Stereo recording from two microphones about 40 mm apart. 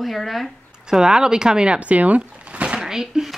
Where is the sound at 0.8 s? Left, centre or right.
Centre.